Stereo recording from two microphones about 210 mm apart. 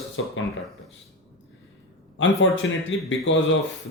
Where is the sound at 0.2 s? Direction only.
65° left (ahead or behind).